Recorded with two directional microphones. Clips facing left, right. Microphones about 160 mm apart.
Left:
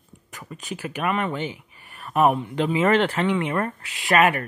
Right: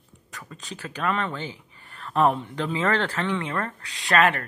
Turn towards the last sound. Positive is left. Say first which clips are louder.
# left 2 dB
turn(degrees=15)  # may be behind; listen again after turning